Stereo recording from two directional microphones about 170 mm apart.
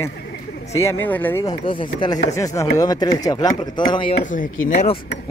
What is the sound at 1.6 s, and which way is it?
Speech, 30° left (ahead or behind).